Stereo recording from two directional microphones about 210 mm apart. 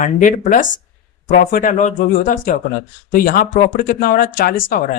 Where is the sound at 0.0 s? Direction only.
40° left (ahead or behind).